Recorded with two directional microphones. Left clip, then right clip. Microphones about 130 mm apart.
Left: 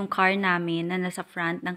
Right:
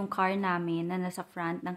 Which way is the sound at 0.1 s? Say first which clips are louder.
Left 7 dB; 20° left (ahead or behind).